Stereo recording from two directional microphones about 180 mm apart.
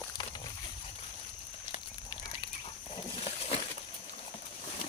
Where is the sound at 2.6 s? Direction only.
30° left (ahead or behind).